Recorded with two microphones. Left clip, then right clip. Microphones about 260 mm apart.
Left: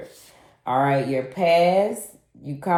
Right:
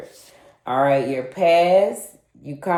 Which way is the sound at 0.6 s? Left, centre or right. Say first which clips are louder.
Right 3 dB; left.